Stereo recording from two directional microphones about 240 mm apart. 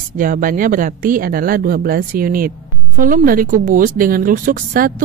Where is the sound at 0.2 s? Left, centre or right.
Right.